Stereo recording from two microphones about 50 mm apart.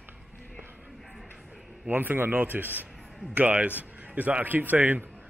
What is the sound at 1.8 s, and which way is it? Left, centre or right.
A man's voice, right.